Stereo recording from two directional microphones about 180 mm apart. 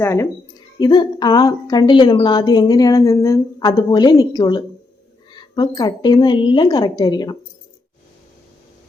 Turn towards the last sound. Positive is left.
turn(degrees=25)  # may be behind; listen again after turning